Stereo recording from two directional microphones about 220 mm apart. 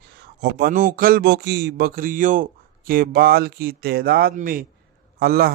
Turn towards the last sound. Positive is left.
turn(degrees=-45)  # may be behind; listen again after turning